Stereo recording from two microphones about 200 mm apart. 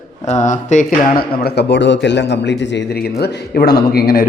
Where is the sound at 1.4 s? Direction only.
55° left (ahead or behind).